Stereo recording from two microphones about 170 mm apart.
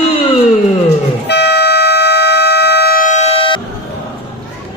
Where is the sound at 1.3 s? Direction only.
85° left; by 3.6 s 30° left (ahead or behind).